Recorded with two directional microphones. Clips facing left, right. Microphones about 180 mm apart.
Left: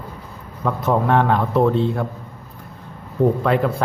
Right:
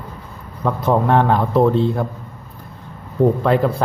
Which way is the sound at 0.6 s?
30° right (ahead or behind).